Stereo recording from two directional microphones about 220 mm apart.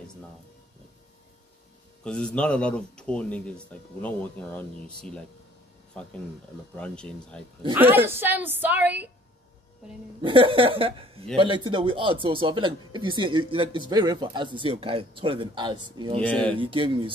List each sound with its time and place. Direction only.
2.0 s a man's voice: 5° left (ahead or behind)
6.7 s a man's voice: 5° left (ahead or behind)
7.7 s a woman's voice: 10° right (ahead or behind)
10.2 s speech: 25° right (ahead or behind)
16.2 s a man's voice: 5° left (ahead or behind)
16.5 s speech: 25° right (ahead or behind)